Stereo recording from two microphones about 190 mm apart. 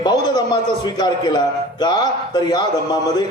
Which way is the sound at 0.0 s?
20° left (ahead or behind).